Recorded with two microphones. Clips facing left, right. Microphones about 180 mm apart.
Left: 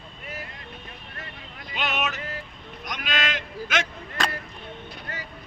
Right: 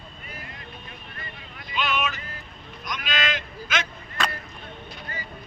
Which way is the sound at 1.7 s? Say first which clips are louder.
Right 1 dB; 65° left (ahead or behind).